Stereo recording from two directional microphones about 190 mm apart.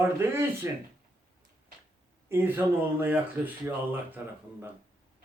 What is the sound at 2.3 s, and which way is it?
Speech, 10° right (ahead or behind).